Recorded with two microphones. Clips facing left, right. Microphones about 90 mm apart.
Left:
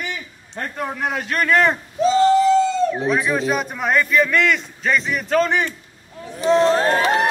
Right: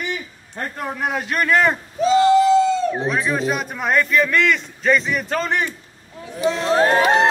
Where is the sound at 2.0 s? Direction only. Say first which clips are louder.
Right 1 dB; 35° left (ahead or behind).